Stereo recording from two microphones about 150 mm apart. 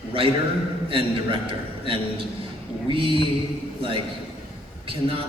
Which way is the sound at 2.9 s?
35° right (ahead or behind).